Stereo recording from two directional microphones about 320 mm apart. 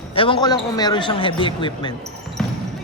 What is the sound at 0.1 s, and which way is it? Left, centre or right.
A man's voice, centre.